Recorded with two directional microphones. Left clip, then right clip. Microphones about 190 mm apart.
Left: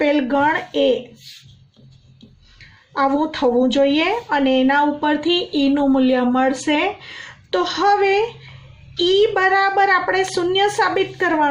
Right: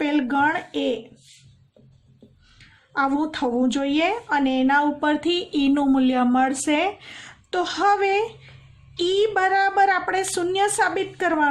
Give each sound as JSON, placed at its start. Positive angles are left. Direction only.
{"t": 0.0, "sound": "a woman's voice", "side_deg": -45}
{"t": 2.9, "sound": "a woman's voice", "side_deg": -45}